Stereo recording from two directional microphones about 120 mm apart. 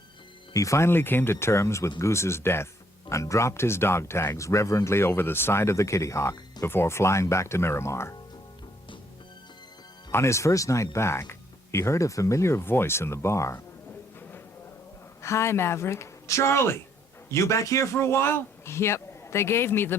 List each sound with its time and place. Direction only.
0.5 s speech: 25° left (ahead or behind)
10.1 s speech: 20° left (ahead or behind)
15.2 s speech: 25° left (ahead or behind)